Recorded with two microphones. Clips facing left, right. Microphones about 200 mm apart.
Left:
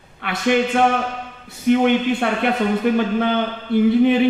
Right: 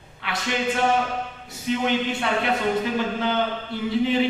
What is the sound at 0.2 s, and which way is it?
A man's voice, 55° left (ahead or behind).